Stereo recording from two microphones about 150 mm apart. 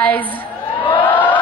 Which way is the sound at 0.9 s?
10° left (ahead or behind).